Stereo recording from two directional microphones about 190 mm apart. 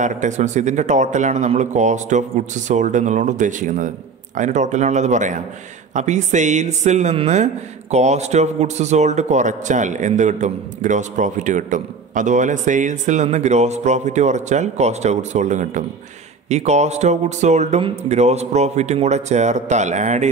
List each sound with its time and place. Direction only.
0.0 s a man's voice: 40° right (ahead or behind)